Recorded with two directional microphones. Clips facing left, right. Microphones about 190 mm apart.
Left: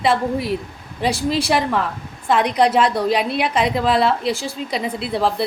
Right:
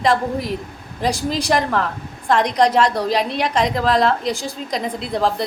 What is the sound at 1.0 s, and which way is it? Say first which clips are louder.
Speech: left 1 dB; 40° right (ahead or behind).